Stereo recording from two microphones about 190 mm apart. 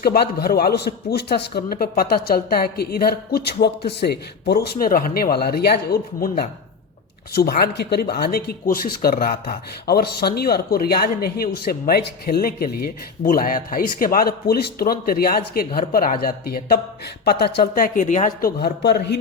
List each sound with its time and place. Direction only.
0.0 s a man's voice: 55° left (ahead or behind)